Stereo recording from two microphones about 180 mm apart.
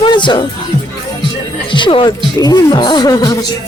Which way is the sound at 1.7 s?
25° left (ahead or behind).